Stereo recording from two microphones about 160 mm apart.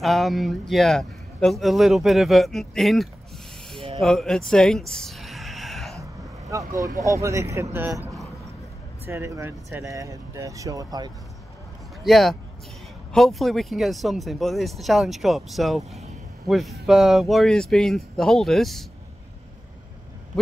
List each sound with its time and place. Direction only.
0.0 s a man's voice: centre (ahead or behind)
4.0 s a sound: centre (ahead or behind)
6.5 s speech: 20° right (ahead or behind)
12.0 s a man's voice: centre (ahead or behind)